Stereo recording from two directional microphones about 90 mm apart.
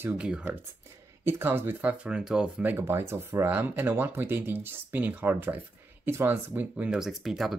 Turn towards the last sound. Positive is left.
turn(degrees=0)  # may be behind; listen again after turning